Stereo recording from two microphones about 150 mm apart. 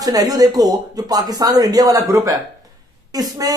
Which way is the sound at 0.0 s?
25° right (ahead or behind).